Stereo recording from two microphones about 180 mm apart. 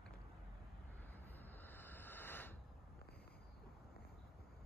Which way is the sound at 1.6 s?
10° left (ahead or behind).